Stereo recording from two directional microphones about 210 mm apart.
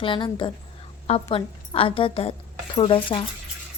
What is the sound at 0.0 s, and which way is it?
A woman's voice, 25° left (ahead or behind).